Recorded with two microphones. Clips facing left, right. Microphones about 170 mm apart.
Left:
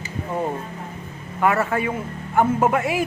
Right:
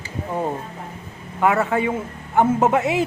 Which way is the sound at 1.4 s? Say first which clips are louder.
Right 2 dB; 15° right (ahead or behind).